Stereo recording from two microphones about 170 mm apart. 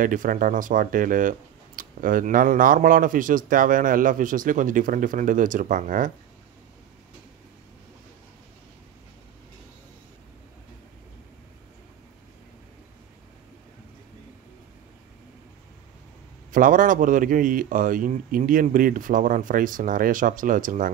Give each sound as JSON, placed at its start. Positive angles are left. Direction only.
{"t": 0.0, "sound": "speech", "side_deg": -50}
{"t": 16.5, "sound": "speech", "side_deg": -50}